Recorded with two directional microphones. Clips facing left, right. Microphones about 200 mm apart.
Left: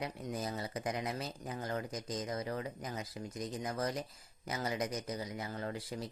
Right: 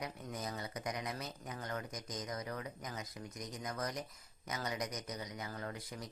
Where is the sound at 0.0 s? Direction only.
30° left (ahead or behind).